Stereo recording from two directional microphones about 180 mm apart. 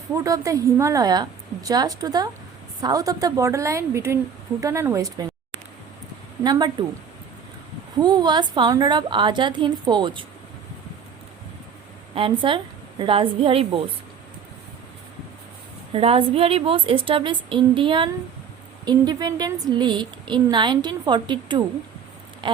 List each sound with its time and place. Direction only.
0.1 s a woman's voice: 15° right (ahead or behind)
6.4 s a woman's voice: 25° right (ahead or behind)
8.0 s a woman's voice: 25° right (ahead or behind)
12.1 s a woman's voice: 30° right (ahead or behind)
15.9 s a woman's voice: 30° right (ahead or behind)
22.4 s patter: 25° right (ahead or behind)